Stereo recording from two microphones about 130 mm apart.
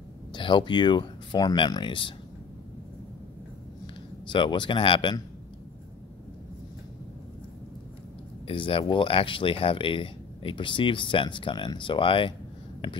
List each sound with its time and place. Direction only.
0.3 s speech: 40° left (ahead or behind)
3.8 s speech: 40° left (ahead or behind)
8.5 s speech: 45° left (ahead or behind)